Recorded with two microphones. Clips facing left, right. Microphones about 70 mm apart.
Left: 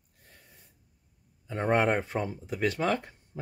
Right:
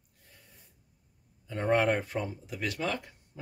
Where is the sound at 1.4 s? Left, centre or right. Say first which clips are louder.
Left 1 dB; left.